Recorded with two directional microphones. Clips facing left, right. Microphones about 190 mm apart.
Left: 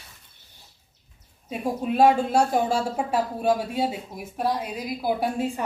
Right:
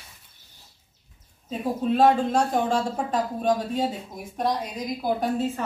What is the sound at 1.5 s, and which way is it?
Speech, 10° left (ahead or behind).